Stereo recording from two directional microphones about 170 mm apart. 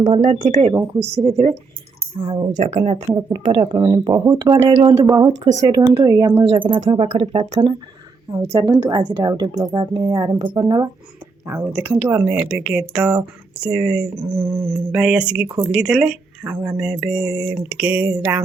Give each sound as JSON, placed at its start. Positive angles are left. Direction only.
{"t": 0.0, "sound": "speech", "side_deg": -40}
{"t": 2.6, "sound": "speech", "side_deg": -40}
{"t": 3.2, "sound": "a woman's voice", "side_deg": -25}
{"t": 5.3, "sound": "speech", "side_deg": -90}
{"t": 5.6, "sound": "a woman's voice", "side_deg": -20}
{"t": 6.5, "sound": "speech", "side_deg": -30}
{"t": 8.4, "sound": "a woman's voice", "side_deg": -30}
{"t": 11.4, "sound": "speech", "side_deg": -10}